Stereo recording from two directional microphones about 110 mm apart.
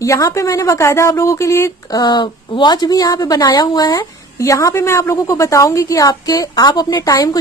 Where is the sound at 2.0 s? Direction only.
40° left (ahead or behind).